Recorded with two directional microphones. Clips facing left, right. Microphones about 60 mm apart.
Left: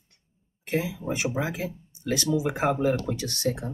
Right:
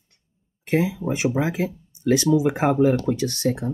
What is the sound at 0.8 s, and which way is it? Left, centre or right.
Speech, right.